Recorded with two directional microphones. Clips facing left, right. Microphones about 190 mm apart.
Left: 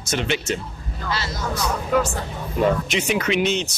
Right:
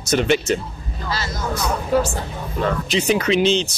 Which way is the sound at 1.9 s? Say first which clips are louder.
Right 2 dB; 35° right (ahead or behind).